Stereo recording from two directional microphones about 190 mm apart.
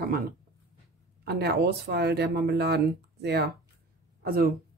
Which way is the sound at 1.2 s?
55° right (ahead or behind).